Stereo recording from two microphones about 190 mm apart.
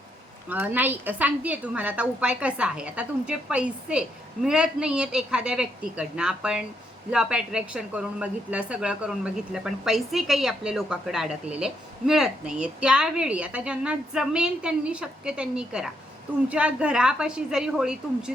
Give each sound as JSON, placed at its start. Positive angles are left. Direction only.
{"t": 0.5, "sound": "a woman's voice", "side_deg": -10}